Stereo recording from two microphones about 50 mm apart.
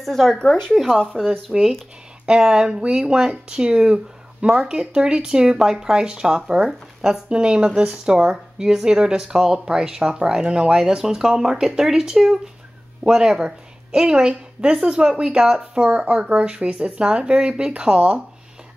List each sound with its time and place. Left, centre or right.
0.0 s speech: centre
0.4 s speech: centre
1.0 s speech: centre